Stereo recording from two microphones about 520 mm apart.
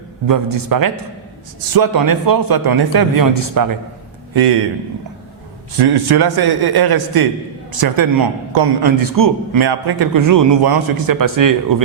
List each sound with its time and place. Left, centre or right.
0.3 s a man's voice: right
4.4 s a man's voice: right
5.7 s a man's voice: right